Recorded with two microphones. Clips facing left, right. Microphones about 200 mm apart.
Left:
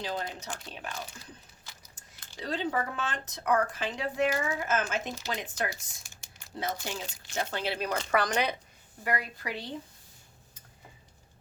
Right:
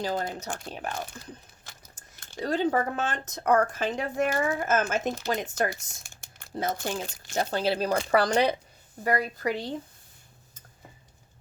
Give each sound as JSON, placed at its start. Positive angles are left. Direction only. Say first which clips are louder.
{"t": 0.0, "sound": "speech", "louder": "right 5 dB", "side_deg": -45}